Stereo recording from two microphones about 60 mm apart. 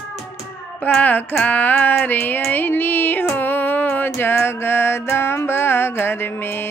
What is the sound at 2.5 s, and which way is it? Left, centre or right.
Music, left.